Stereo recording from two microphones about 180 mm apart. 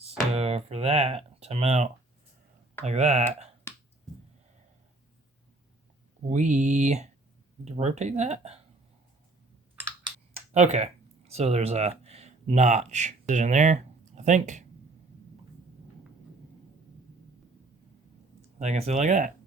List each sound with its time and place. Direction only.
0.0 s speech: 35° right (ahead or behind)
6.2 s speech: 40° right (ahead or behind)
10.5 s speech: 40° right (ahead or behind)
18.6 s speech: 40° right (ahead or behind)